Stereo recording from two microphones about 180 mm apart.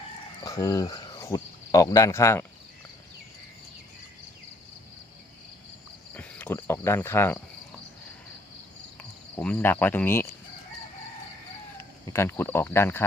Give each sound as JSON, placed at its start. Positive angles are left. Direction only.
{"t": 0.4, "sound": "speech", "side_deg": 20}
{"t": 6.1, "sound": "speech", "side_deg": 10}
{"t": 9.0, "sound": "cricket", "side_deg": 5}
{"t": 11.8, "sound": "speech", "side_deg": 15}